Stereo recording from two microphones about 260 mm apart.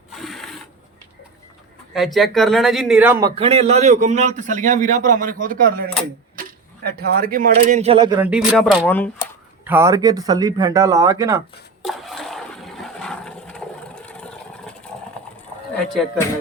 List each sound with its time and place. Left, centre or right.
0.1 s filing: centre
1.9 s a man's voice: centre
9.6 s a sound: centre
14.0 s vehicle: centre